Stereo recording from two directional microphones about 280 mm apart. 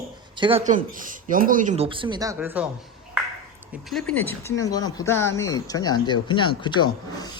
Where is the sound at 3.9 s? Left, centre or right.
Centre.